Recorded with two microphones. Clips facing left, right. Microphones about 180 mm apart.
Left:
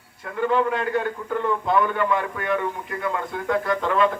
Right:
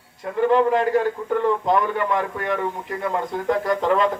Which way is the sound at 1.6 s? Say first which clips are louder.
Right 1 dB; 40° right (ahead or behind).